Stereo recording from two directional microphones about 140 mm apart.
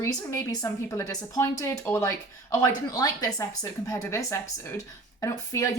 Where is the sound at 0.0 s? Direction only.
20° left (ahead or behind).